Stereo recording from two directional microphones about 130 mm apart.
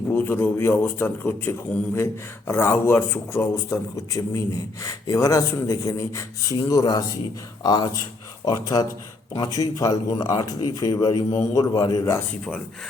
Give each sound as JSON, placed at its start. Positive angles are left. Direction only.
{"t": 0.1, "sound": "a man's voice", "side_deg": 15}